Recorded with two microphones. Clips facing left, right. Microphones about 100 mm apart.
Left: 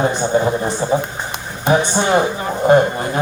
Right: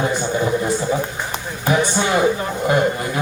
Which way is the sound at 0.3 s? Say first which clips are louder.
Left 2 dB; 35° left (ahead or behind).